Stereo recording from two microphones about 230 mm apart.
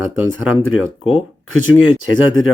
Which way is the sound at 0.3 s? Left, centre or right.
Left.